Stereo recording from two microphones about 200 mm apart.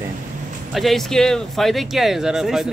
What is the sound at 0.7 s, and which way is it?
Speech, centre (ahead or behind).